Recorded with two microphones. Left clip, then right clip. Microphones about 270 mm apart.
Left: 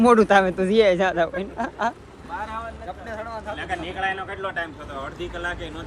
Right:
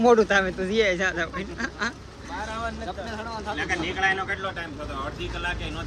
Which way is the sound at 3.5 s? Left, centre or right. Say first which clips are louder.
Right 3 dB; centre.